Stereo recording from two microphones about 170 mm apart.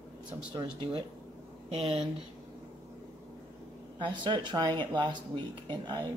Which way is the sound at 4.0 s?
25° right (ahead or behind).